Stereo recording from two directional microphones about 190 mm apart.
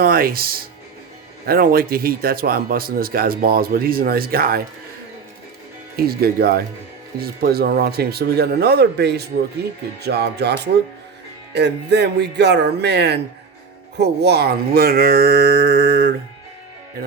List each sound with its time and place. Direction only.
0.0 s speech: 50° right (ahead or behind)
6.0 s speech: 55° right (ahead or behind)